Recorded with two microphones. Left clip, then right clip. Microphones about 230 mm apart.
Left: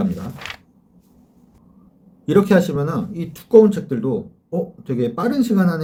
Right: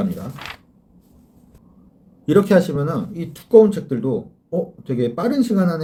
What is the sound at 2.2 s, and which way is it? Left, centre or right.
Speech, centre.